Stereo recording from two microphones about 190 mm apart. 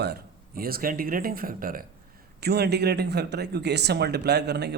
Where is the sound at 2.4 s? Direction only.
60° right (ahead or behind).